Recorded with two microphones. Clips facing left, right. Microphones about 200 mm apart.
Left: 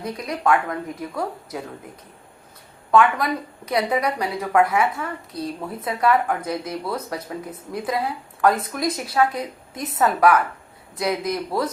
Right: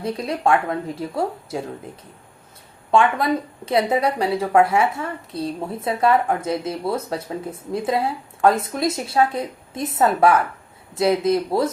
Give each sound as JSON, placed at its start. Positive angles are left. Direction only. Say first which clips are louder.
{"t": 0.0, "sound": "a woman's voice", "louder": "right 2 dB", "side_deg": -30}
{"t": 2.9, "sound": "a woman's voice", "louder": "even", "side_deg": -25}